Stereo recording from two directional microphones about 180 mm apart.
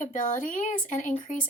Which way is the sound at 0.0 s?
45° left (ahead or behind).